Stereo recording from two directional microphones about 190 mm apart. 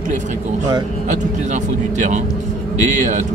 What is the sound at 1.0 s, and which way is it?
A man's voice, 40° right (ahead or behind).